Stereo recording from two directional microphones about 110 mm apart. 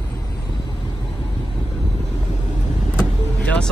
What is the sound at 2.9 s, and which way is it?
Vehicle, 10° left (ahead or behind).